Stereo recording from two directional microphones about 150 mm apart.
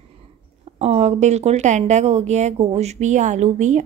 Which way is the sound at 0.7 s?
45° right (ahead or behind).